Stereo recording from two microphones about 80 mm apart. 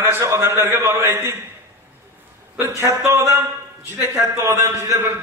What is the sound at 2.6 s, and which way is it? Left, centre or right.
A man's voice, right.